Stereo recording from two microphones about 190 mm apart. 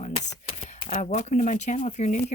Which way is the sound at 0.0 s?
35° left (ahead or behind).